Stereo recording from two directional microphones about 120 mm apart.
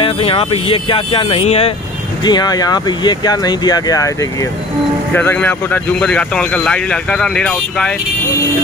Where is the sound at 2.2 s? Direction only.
35° left (ahead or behind).